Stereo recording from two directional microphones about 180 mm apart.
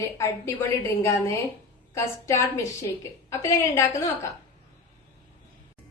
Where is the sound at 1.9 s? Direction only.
15° left (ahead or behind).